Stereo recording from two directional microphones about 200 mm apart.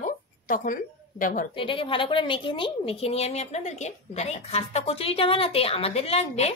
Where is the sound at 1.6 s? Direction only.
25° left (ahead or behind).